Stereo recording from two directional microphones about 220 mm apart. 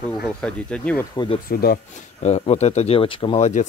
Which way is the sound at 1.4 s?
40° left (ahead or behind).